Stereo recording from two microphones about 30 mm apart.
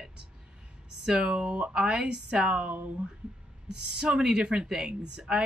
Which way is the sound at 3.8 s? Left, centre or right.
Right.